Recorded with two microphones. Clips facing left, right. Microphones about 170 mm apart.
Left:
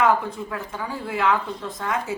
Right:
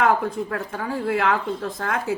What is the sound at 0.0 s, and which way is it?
Speech, 60° right (ahead or behind).